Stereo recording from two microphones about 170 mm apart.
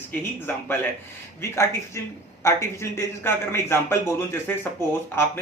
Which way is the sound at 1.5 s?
15° left (ahead or behind).